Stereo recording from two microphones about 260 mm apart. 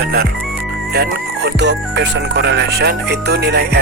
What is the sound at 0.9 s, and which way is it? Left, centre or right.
Speech, right.